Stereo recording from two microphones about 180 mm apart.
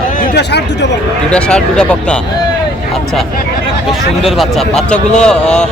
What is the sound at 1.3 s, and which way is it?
Speech, 5° left (ahead or behind).